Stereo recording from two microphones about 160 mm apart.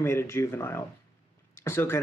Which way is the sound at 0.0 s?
15° left (ahead or behind).